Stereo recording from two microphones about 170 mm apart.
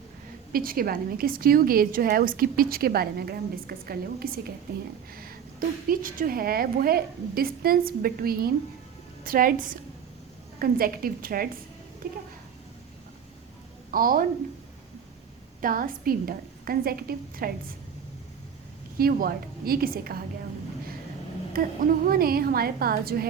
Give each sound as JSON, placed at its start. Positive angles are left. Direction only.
{"t": 0.5, "sound": "a woman's voice", "side_deg": -60}
{"t": 13.9, "sound": "a woman's voice", "side_deg": -55}
{"t": 15.6, "sound": "a woman's voice", "side_deg": -55}
{"t": 18.9, "sound": "a woman's voice", "side_deg": -60}
{"t": 22.0, "sound": "a woman's voice", "side_deg": -60}